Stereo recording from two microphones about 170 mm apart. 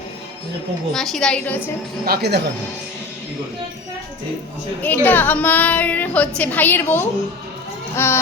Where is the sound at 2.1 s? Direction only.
75° right (ahead or behind).